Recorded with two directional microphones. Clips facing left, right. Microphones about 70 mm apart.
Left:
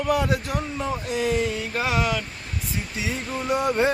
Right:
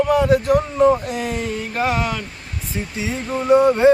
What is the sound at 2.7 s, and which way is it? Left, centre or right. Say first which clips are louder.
Speech: right 5 dB; right.